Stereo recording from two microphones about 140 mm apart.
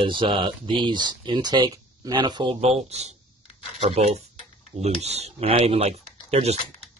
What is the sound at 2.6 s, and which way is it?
Speech, 50° right (ahead or behind).